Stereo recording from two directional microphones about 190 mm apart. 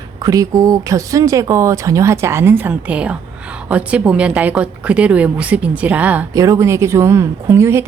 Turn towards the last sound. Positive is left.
turn(degrees=-15)  # may be behind; listen again after turning